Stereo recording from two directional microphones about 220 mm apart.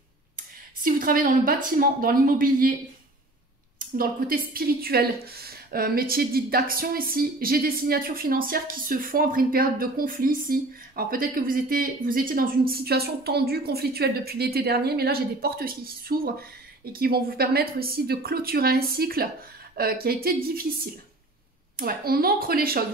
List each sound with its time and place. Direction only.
0.8 s a woman's voice: 40° right (ahead or behind)
3.9 s a woman's voice: 40° right (ahead or behind)